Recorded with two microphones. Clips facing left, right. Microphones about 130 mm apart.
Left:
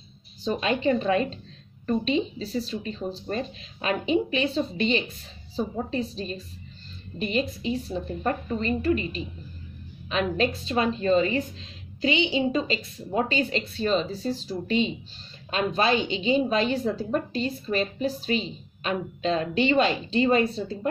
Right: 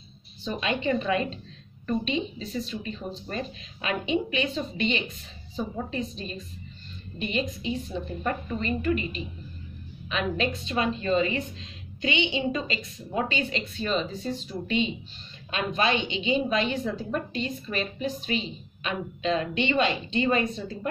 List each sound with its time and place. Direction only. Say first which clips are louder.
0.4 s a woman's voice: left 4 dB; 35° left (ahead or behind)